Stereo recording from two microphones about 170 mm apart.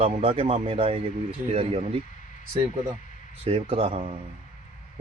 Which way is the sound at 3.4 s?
35° right (ahead or behind).